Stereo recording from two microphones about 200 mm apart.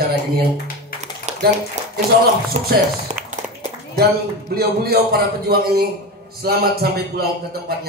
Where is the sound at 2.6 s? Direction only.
35° right (ahead or behind).